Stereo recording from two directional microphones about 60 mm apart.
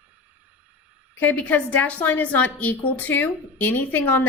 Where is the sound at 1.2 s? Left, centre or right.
Left.